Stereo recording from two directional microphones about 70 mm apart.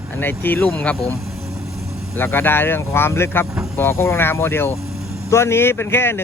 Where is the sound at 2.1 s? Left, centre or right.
Left.